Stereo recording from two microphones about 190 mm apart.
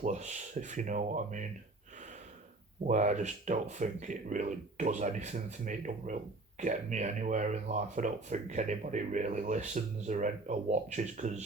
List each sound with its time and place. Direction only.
0.0 s speech: 40° right (ahead or behind)
2.8 s speech: 40° right (ahead or behind)